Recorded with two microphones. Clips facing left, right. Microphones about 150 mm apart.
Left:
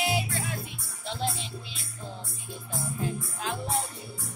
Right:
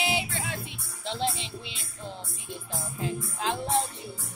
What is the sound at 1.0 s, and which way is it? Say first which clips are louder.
Speech: right 2 dB; 25° right (ahead or behind).